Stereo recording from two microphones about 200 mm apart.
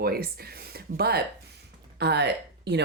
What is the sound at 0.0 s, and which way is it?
Speech, 50° right (ahead or behind).